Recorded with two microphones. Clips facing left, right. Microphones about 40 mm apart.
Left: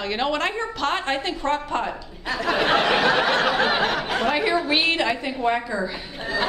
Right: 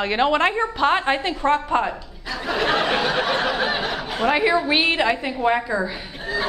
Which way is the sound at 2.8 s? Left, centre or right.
Left.